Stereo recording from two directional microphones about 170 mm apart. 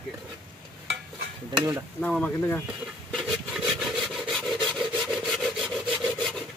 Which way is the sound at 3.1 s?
Centre (ahead or behind).